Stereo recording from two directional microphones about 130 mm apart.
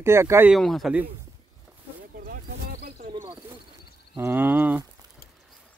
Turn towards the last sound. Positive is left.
turn(degrees=-15)  # may be behind; listen again after turning